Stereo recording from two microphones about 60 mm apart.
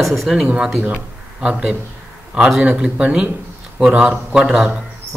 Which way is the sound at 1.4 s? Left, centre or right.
Centre.